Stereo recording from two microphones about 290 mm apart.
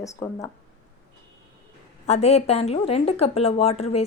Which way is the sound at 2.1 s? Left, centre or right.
Left.